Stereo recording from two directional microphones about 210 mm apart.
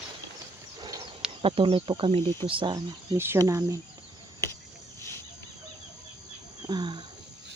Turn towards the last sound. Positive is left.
turn(degrees=-20)  # may be behind; listen again after turning